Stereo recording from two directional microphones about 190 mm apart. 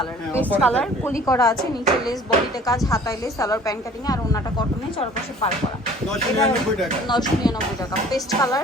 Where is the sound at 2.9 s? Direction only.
15° left (ahead or behind).